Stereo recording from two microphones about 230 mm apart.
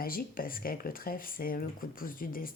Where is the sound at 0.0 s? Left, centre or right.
Left.